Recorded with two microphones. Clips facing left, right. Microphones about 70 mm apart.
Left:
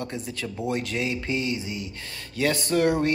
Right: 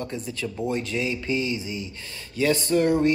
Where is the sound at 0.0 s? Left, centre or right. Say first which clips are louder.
Right 1 dB; left.